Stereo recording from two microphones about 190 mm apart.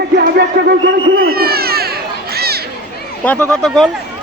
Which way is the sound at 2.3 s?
55° right (ahead or behind).